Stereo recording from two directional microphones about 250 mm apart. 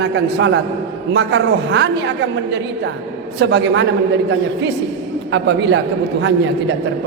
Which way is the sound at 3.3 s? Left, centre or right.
Right.